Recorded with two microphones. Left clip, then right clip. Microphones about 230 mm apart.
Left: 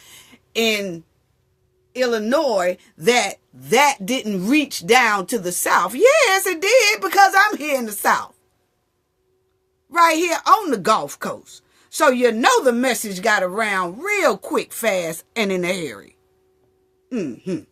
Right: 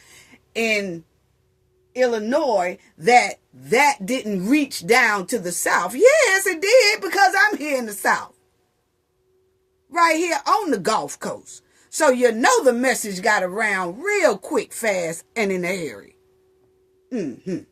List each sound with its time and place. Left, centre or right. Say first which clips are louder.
0.0 s a sound: left 3 dB; left
1.9 s speech: even; left
9.9 s speech: left 2 dB; left